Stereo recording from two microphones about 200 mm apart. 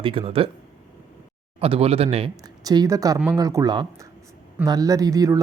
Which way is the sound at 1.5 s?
30° right (ahead or behind).